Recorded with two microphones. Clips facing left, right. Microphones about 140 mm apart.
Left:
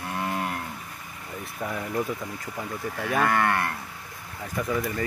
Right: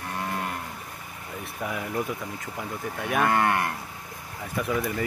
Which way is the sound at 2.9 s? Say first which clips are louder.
Even; 15° right (ahead or behind).